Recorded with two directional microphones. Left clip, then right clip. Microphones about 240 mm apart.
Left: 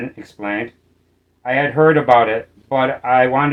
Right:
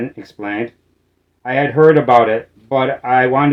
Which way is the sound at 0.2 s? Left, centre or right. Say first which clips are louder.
Right 1 dB; right.